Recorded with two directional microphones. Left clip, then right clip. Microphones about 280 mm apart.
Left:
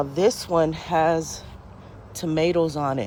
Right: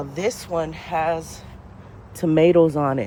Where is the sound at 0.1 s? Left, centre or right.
Centre.